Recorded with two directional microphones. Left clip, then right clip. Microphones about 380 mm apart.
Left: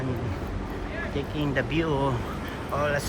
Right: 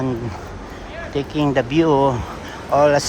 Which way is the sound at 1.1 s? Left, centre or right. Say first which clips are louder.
Right 11 dB; centre.